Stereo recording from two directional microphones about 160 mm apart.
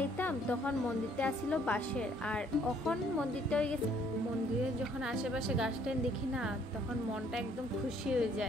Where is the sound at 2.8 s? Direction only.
5° left (ahead or behind).